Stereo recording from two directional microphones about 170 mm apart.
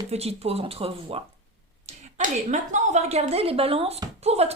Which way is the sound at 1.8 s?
45° right (ahead or behind).